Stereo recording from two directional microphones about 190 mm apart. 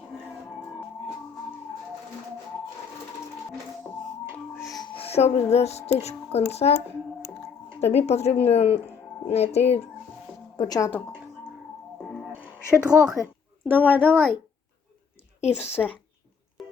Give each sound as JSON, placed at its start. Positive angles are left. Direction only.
{"t": 4.8, "sound": "music", "side_deg": 30}
{"t": 6.5, "sound": "speech", "side_deg": 35}
{"t": 7.8, "sound": "speech", "side_deg": 35}
{"t": 10.6, "sound": "speech", "side_deg": 20}
{"t": 12.4, "sound": "a woman's voice", "side_deg": -5}
{"t": 15.4, "sound": "speech", "side_deg": 35}
{"t": 16.6, "sound": "a sound", "side_deg": 0}